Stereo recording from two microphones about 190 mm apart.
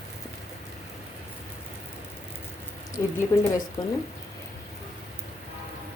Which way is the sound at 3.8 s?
20° left (ahead or behind).